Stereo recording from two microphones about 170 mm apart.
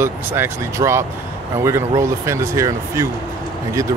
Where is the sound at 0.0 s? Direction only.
15° right (ahead or behind).